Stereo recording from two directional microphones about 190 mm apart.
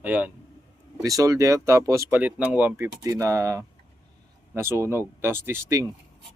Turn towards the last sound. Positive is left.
turn(degrees=-15)  # may be behind; listen again after turning